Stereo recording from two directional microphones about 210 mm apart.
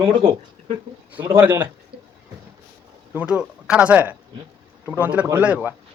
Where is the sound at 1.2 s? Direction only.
15° right (ahead or behind).